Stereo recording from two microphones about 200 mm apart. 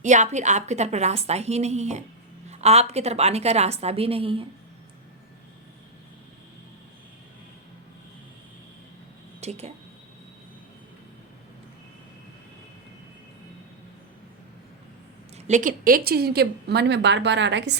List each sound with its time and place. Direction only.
0.0 s a woman's voice: 35° right (ahead or behind)
9.4 s speech: 30° right (ahead or behind)
15.4 s a woman's voice: 35° right (ahead or behind); by 17.7 s 60° right (ahead or behind)